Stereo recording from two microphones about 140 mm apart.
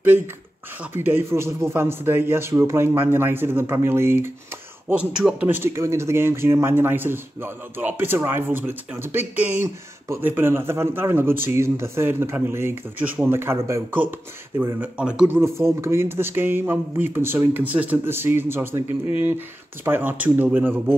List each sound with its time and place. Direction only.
0.9 s speech: 15° right (ahead or behind)
4.8 s speech: 5° right (ahead or behind)